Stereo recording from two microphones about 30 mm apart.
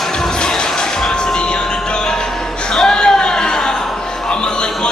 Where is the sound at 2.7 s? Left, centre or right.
Left.